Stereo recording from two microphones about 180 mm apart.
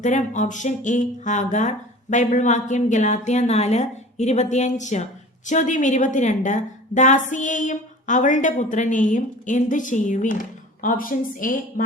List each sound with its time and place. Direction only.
0.0 s a woman's voice: 40° left (ahead or behind)